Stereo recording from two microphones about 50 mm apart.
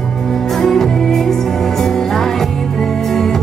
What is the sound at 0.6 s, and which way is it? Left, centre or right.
Music, centre.